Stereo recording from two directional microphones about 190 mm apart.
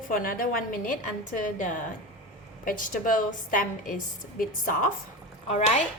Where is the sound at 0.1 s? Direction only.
45° left (ahead or behind).